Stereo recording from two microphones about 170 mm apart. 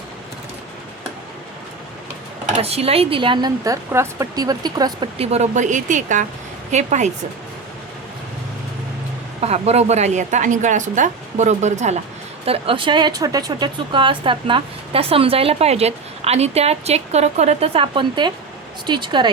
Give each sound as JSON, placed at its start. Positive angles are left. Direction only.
{"t": 2.6, "sound": "a woman's voice", "side_deg": -35}
{"t": 9.4, "sound": "a woman's voice", "side_deg": -40}